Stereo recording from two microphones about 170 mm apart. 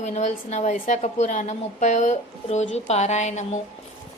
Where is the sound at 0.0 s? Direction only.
45° left (ahead or behind).